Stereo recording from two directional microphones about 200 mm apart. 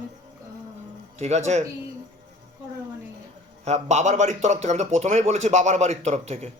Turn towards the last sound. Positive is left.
turn(degrees=-35)  # may be behind; listen again after turning